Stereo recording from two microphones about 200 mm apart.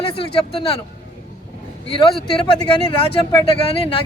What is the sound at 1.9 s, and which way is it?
A man's voice, 25° left (ahead or behind).